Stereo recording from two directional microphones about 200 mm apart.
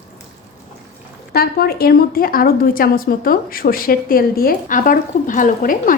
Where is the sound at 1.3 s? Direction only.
50° left (ahead or behind).